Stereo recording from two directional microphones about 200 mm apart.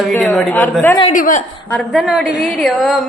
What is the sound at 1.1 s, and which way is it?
Speech, 40° left (ahead or behind).